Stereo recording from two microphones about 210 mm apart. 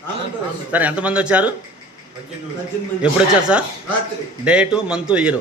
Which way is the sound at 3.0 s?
5° right (ahead or behind).